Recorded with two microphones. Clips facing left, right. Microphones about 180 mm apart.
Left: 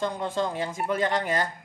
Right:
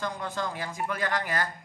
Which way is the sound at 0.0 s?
25° left (ahead or behind).